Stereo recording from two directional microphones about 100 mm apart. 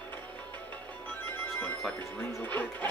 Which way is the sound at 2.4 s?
15° left (ahead or behind).